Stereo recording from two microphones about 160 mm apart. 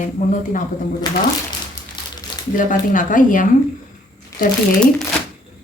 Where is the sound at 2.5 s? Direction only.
55° left (ahead or behind).